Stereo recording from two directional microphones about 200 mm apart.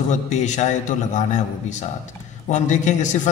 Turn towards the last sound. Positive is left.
turn(degrees=35)  # may be behind; listen again after turning